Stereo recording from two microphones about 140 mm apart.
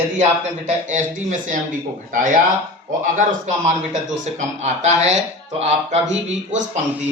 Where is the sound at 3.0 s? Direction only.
60° right (ahead or behind).